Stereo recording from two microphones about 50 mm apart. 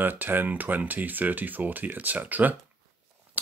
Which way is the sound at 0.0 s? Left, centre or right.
Right.